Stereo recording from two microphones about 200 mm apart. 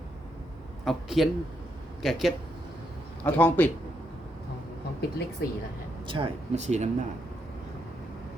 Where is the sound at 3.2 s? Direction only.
10° left (ahead or behind).